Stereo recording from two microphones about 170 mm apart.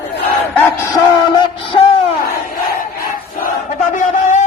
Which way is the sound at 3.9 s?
45° left (ahead or behind).